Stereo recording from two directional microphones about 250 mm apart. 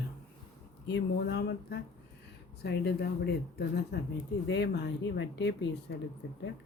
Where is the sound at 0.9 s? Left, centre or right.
Left.